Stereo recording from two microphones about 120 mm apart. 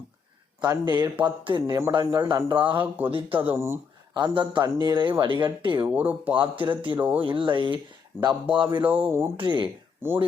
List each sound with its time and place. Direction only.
0.6 s speech: 35° right (ahead or behind)
2.7 s speech: 15° right (ahead or behind)
4.1 s speech: 40° right (ahead or behind)
5.8 s speech: 15° right (ahead or behind)
6.3 s speech: 45° right (ahead or behind)
8.3 s speech: 10° right (ahead or behind)
9.4 s speech: 40° right (ahead or behind)
10.0 s speech: 15° right (ahead or behind)